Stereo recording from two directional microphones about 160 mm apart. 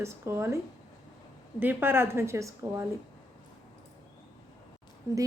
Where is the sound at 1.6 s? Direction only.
15° right (ahead or behind).